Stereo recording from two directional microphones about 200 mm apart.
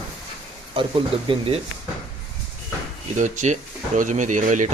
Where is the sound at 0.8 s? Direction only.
25° right (ahead or behind).